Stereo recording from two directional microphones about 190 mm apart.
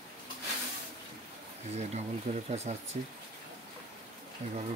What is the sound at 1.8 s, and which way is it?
Speech, 35° right (ahead or behind).